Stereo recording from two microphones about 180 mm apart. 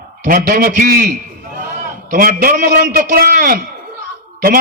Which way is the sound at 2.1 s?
55° right (ahead or behind).